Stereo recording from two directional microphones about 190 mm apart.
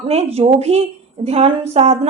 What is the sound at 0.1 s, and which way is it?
A woman's voice, 35° right (ahead or behind).